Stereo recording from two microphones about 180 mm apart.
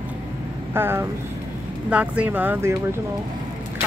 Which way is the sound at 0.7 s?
15° right (ahead or behind).